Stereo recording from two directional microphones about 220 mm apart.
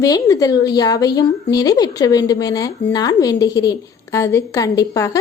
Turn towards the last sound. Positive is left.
turn(degrees=15)  # may be behind; listen again after turning